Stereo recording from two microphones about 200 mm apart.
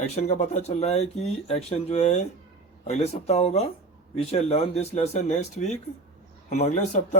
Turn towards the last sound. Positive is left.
turn(degrees=35)  # may be behind; listen again after turning